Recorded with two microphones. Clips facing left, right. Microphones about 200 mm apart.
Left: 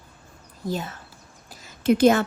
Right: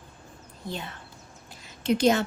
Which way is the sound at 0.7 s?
45° left (ahead or behind).